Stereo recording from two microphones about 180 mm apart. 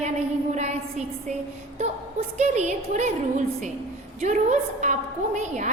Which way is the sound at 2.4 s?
40° right (ahead or behind).